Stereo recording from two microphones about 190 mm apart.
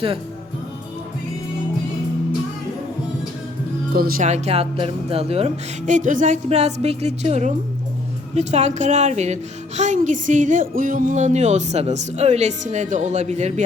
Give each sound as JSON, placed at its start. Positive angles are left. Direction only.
{"t": 3.9, "sound": "speech", "side_deg": -50}
{"t": 4.3, "sound": "a woman's voice", "side_deg": -35}